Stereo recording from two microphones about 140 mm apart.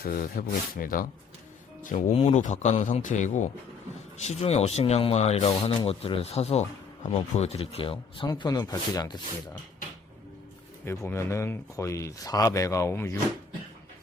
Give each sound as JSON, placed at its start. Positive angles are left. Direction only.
{"t": 0.0, "sound": "speech", "side_deg": 90}
{"t": 1.8, "sound": "speech", "side_deg": 65}
{"t": 2.1, "sound": "a man's voice", "side_deg": 50}
{"t": 4.2, "sound": "speech", "side_deg": 50}
{"t": 8.3, "sound": "speech", "side_deg": 30}
{"t": 10.8, "sound": "speech", "side_deg": 20}